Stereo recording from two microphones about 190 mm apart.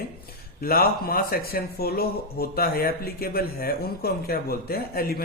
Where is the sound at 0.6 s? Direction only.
50° left (ahead or behind).